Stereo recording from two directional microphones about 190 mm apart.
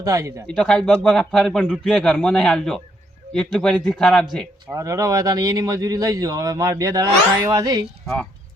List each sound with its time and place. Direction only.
0.0 s speech: 15° right (ahead or behind)
0.4 s a man's voice: 5° left (ahead or behind)
4.7 s speech: 15° right (ahead or behind)